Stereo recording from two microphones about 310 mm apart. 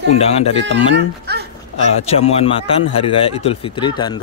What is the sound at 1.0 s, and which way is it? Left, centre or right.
Speech, right.